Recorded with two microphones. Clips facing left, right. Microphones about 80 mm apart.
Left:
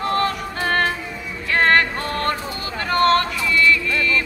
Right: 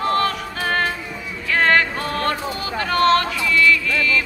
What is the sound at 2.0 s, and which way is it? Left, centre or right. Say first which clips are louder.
Music: right 1 dB; centre.